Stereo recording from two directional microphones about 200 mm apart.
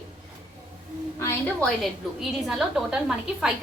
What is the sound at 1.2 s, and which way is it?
Speech, 10° left (ahead or behind).